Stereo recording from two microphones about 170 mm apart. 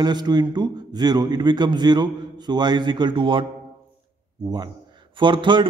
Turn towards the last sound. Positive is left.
turn(degrees=-30)  # may be behind; listen again after turning